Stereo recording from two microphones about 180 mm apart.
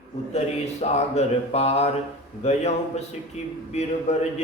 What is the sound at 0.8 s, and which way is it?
Speech, 35° left (ahead or behind).